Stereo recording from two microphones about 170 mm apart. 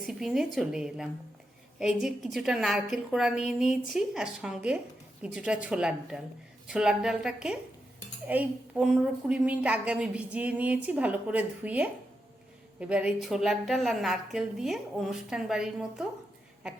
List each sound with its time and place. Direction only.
0.0 s a woman's voice: centre (ahead or behind)